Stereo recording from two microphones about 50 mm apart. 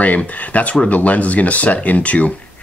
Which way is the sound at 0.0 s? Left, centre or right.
Left.